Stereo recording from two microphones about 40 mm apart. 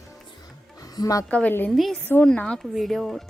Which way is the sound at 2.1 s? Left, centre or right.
Left.